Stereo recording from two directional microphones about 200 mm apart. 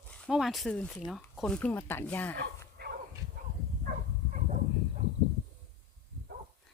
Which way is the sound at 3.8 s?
40° right (ahead or behind).